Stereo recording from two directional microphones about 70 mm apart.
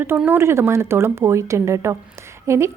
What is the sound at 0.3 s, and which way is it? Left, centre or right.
A woman's voice, right.